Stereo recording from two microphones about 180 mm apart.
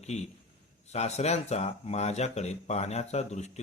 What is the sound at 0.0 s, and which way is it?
A man's voice, 40° left (ahead or behind).